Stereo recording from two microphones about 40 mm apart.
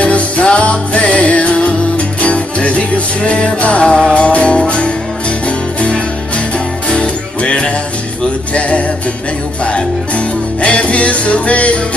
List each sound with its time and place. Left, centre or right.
0.0 s music: left